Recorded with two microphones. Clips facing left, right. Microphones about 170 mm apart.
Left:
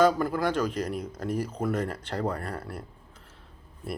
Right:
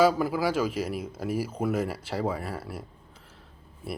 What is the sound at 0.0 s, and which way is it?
Speech, 5° right (ahead or behind).